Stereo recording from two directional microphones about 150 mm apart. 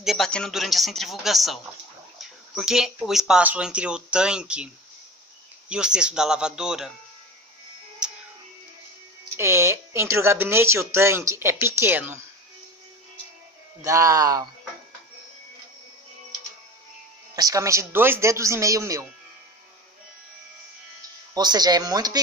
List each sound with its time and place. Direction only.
0.0 s speech: centre (ahead or behind)
5.7 s speech: 5° right (ahead or behind)
8.0 s music: 5° right (ahead or behind)
9.4 s speech: 20° right (ahead or behind)
13.8 s speech: 20° right (ahead or behind)
17.4 s speech: 20° right (ahead or behind)
21.4 s speech: 25° right (ahead or behind)